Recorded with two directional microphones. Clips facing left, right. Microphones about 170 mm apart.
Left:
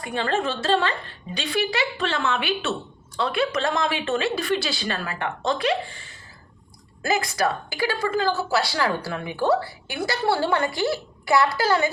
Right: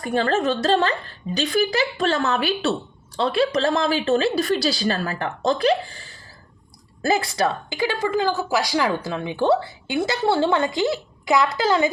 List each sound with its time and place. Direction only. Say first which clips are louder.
0.0 s a woman's voice: right 4 dB; 40° right (ahead or behind); by 11.9 s 20° right (ahead or behind)